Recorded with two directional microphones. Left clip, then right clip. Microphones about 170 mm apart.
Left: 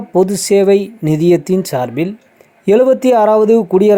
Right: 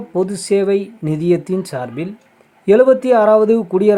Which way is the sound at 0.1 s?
20° left (ahead or behind).